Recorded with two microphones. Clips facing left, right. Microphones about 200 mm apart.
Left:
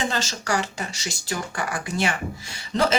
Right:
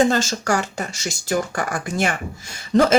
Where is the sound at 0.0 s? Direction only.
45° right (ahead or behind).